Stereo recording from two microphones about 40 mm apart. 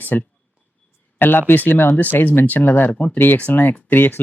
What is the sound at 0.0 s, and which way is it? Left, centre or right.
Speech, left.